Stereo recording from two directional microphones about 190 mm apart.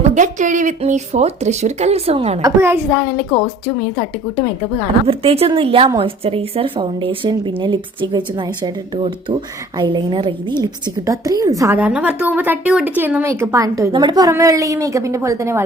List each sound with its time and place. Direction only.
0.1 s speech: 40° right (ahead or behind)
2.4 s a woman's voice: 15° right (ahead or behind)
5.0 s a woman's voice: 30° right (ahead or behind); by 15.6 s 15° right (ahead or behind)